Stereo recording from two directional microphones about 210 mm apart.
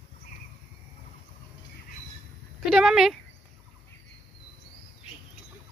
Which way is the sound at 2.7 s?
Centre (ahead or behind).